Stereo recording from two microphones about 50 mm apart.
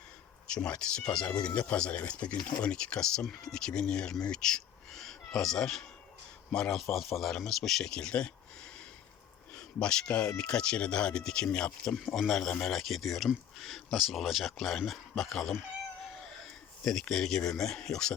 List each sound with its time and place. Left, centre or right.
0.4 s speech: left
6.7 s speech: centre
7.9 s a sound: centre
9.8 s speech: centre
11.9 s speech: centre
16.8 s speech: centre